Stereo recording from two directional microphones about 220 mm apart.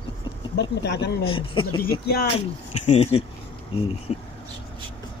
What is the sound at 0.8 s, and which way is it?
Speech, 50° left (ahead or behind).